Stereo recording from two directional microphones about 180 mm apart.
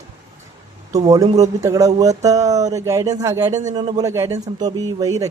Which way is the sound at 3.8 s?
20° right (ahead or behind).